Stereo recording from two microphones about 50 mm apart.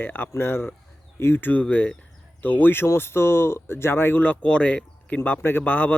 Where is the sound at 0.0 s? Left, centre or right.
Left.